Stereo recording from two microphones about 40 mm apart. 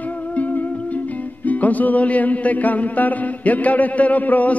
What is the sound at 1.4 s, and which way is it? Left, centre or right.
Music, left.